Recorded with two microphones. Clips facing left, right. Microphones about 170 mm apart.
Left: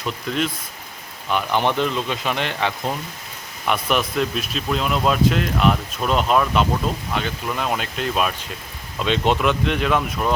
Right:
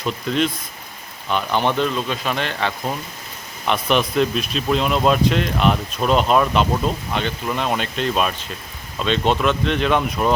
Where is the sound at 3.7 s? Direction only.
5° left (ahead or behind).